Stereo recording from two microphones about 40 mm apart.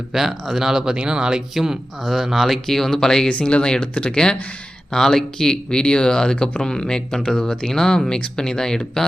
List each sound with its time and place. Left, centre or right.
0.1 s speech: centre
2.0 s speech: centre
2.6 s speech: centre
3.2 s speech: left
4.9 s speech: centre
7.7 s speech: centre